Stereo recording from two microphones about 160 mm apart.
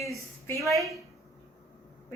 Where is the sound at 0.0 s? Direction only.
20° left (ahead or behind).